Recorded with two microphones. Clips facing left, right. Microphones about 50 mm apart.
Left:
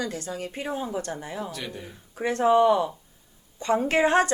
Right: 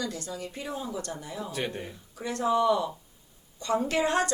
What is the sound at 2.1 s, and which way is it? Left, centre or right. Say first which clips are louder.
A woman's voice: left 6 dB; left.